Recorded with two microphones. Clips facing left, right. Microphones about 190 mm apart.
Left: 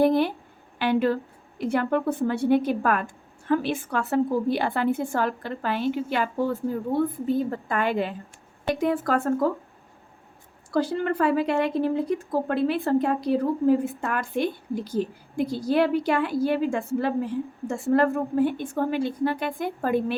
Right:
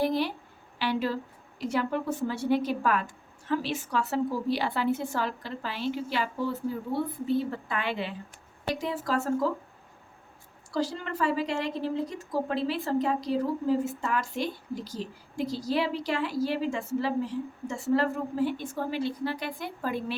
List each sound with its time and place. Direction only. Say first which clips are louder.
0.0 s a woman's voice: left 7 dB; 55° left (ahead or behind)
10.7 s a woman's voice: left 7 dB; 55° left (ahead or behind)